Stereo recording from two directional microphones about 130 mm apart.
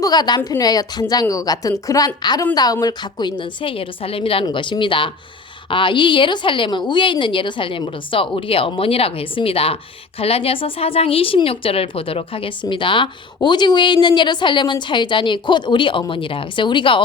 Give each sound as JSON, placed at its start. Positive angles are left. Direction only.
{"t": 0.0, "sound": "a woman's voice", "side_deg": 30}